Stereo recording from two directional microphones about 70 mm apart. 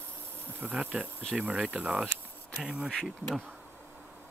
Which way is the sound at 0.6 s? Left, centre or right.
Centre.